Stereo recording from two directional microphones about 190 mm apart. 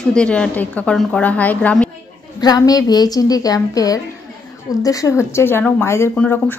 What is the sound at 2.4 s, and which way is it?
A woman's voice, 20° left (ahead or behind).